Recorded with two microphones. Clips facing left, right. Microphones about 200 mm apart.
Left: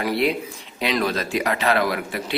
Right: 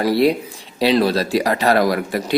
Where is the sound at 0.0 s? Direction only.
35° right (ahead or behind).